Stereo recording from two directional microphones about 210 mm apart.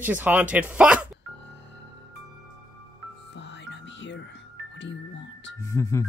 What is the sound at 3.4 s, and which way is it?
Music, 55° left (ahead or behind).